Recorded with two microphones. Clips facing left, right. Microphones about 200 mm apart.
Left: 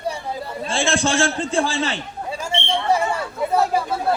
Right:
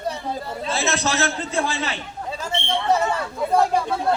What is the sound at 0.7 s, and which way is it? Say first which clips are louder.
A man's voice: left 3 dB; 30° left (ahead or behind).